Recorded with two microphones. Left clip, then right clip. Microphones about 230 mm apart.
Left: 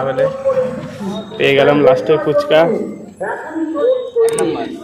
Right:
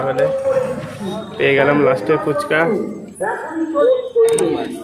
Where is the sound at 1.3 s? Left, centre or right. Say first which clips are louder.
Left 3 dB; centre.